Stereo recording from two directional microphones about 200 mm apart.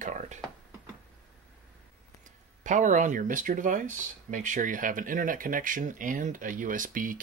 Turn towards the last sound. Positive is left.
turn(degrees=-40)  # may be behind; listen again after turning